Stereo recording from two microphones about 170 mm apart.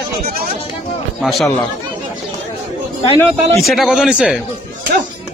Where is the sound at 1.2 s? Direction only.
Centre (ahead or behind).